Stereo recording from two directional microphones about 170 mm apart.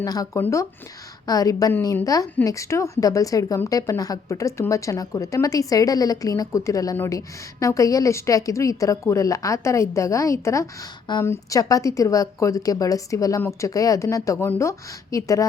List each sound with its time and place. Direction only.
0.0 s a woman's voice: 20° left (ahead or behind)